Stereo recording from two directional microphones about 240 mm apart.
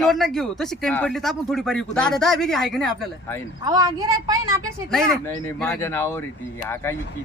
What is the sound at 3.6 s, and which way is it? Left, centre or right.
Speech, centre.